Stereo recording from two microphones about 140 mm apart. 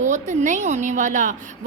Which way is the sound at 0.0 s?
60° right (ahead or behind).